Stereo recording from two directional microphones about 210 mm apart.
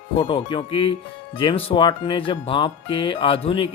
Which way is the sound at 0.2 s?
25° left (ahead or behind).